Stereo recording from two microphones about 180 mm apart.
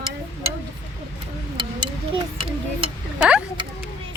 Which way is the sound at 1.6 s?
25° right (ahead or behind).